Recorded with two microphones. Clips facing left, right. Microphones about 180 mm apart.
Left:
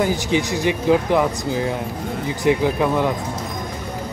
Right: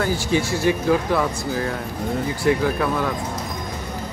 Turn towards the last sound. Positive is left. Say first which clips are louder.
# left 3 dB
turn(degrees=20)  # may be behind; listen again after turning